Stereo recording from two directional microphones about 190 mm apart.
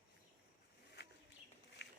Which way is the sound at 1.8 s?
65° left (ahead or behind).